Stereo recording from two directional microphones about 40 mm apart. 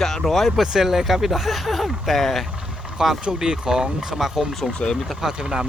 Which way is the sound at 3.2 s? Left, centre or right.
Centre.